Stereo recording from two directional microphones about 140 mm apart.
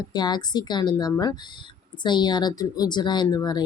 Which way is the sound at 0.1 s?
30° left (ahead or behind).